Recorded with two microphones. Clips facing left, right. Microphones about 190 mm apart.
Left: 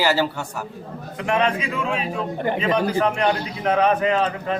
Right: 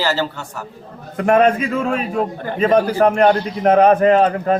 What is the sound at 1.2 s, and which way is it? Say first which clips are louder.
A man's voice: right 8 dB; 45° right (ahead or behind).